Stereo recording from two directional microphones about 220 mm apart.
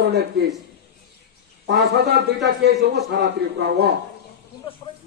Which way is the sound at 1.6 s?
50° right (ahead or behind).